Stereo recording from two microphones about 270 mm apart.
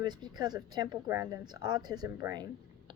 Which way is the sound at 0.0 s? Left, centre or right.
Centre.